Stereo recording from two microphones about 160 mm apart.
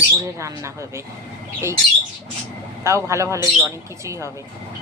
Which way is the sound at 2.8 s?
20° right (ahead or behind).